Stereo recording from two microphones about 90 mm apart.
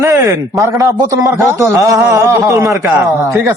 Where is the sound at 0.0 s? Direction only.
35° right (ahead or behind).